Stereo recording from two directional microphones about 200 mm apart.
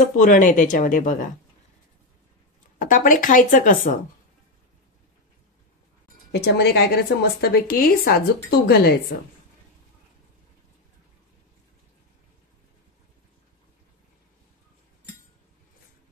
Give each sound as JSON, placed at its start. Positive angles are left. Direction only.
{"t": 0.2, "sound": "speech", "side_deg": 40}
{"t": 2.8, "sound": "speech", "side_deg": 40}
{"t": 6.3, "sound": "a woman's voice", "side_deg": 55}